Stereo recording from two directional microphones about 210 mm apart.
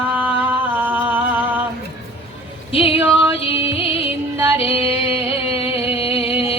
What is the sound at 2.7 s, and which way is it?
Female singing, 25° left (ahead or behind).